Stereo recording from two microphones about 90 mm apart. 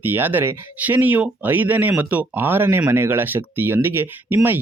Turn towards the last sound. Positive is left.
turn(degrees=-20)  # may be behind; listen again after turning